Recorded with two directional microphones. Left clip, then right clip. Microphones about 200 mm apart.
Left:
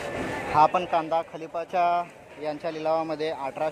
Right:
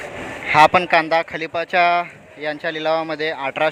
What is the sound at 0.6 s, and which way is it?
Speech, 20° right (ahead or behind).